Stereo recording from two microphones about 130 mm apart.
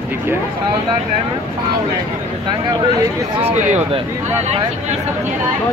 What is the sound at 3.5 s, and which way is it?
Speech, 65° right (ahead or behind).